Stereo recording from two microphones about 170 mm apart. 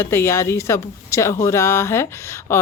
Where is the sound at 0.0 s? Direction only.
15° left (ahead or behind).